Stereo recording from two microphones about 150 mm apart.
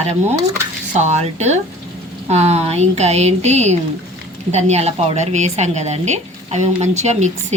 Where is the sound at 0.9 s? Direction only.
50° right (ahead or behind).